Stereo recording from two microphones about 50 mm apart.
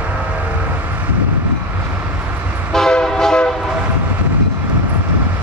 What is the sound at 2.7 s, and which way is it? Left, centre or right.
Train, centre.